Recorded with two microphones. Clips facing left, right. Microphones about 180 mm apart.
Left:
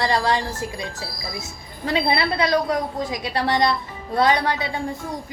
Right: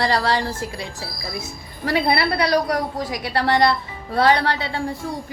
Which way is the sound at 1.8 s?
20° left (ahead or behind).